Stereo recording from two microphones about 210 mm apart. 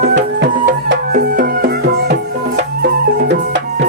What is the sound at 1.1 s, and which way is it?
Music, 45° right (ahead or behind).